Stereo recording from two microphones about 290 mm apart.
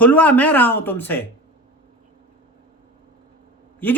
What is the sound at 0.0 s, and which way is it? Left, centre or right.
Speech, centre.